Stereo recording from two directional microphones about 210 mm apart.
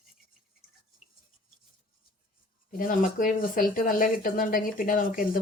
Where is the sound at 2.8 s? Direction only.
40° left (ahead or behind).